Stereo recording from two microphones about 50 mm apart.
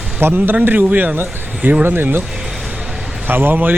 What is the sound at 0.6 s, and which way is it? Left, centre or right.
Speech, right.